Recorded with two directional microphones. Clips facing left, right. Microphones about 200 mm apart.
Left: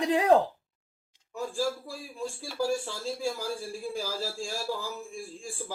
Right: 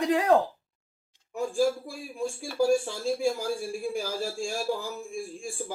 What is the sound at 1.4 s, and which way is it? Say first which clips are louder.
A man's voice: right 5 dB; 15° right (ahead or behind).